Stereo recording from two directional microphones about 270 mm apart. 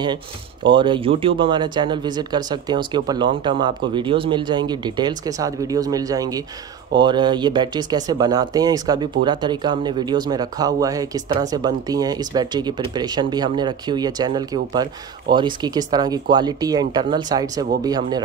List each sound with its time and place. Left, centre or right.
0.7 s speech: centre